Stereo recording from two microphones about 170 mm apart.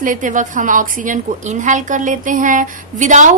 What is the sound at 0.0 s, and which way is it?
A woman's voice, 50° right (ahead or behind).